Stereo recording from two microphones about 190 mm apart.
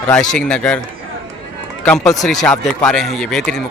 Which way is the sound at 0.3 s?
5° left (ahead or behind).